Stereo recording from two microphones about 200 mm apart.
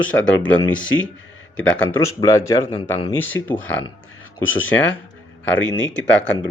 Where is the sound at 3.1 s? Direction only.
10° left (ahead or behind).